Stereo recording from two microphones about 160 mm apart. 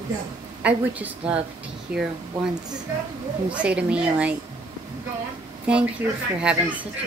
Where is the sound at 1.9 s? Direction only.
70° right (ahead or behind).